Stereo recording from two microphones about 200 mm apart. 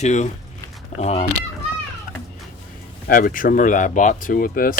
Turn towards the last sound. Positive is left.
turn(degrees=45)  # may be behind; listen again after turning